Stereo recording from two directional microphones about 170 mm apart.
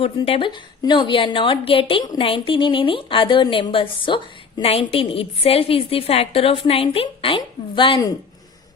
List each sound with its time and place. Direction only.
0.0 s a woman's voice: 30° left (ahead or behind)